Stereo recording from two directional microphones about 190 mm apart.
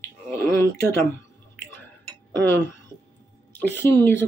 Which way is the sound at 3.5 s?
10° left (ahead or behind).